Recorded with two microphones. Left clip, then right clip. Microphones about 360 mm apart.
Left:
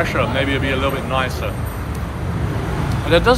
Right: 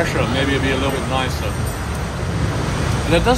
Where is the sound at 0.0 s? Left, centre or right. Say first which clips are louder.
Even; centre.